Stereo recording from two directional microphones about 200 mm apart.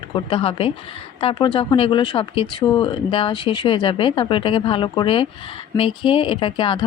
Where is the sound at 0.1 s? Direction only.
30° left (ahead or behind).